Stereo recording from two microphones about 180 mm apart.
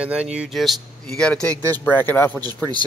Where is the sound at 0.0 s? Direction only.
5° right (ahead or behind).